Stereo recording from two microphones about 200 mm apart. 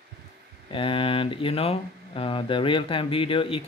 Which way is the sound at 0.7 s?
25° left (ahead or behind).